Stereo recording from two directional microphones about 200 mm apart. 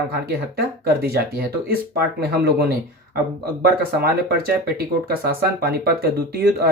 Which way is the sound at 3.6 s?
50° right (ahead or behind).